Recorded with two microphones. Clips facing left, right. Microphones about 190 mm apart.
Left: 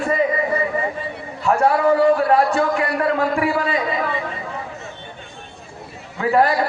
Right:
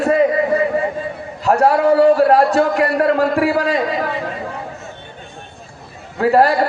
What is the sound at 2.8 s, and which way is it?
Speech, 55° right (ahead or behind).